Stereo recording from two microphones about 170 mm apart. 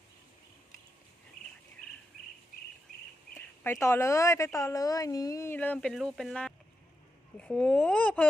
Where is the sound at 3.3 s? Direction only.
15° left (ahead or behind).